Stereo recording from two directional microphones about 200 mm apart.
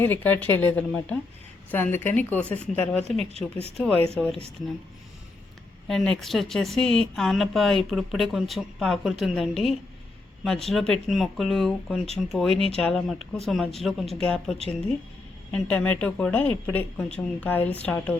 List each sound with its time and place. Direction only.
0.0 s a woman's voice: 10° left (ahead or behind)
3.2 s speech: 30° right (ahead or behind)
3.8 s speech: 5° left (ahead or behind)
5.9 s speech: centre (ahead or behind)
15.5 s a woman's voice: 5° left (ahead or behind)